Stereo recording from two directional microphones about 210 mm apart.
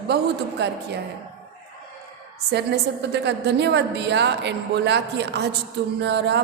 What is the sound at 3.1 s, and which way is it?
A woman's voice, 55° right (ahead or behind).